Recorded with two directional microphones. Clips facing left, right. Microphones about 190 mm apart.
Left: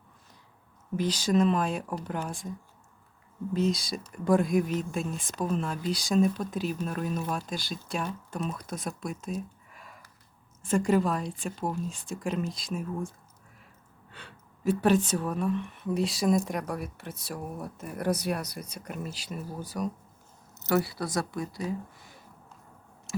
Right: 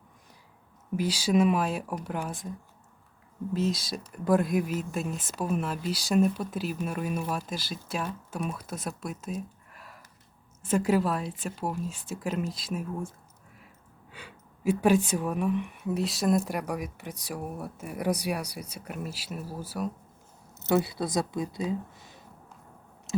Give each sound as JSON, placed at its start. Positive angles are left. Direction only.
{"t": 0.9, "sound": "speech", "side_deg": -10}
{"t": 3.5, "sound": "speech", "side_deg": 0}
{"t": 20.7, "sound": "speech", "side_deg": -20}